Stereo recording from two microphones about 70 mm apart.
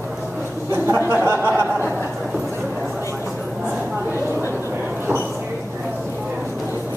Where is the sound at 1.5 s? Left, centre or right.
Right.